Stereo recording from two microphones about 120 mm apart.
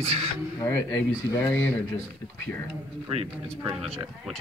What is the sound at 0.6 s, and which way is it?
Speech, 20° left (ahead or behind).